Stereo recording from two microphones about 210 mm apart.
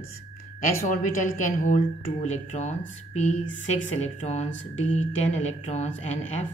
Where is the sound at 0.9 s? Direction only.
40° left (ahead or behind).